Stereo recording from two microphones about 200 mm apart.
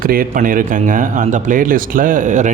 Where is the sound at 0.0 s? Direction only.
45° right (ahead or behind).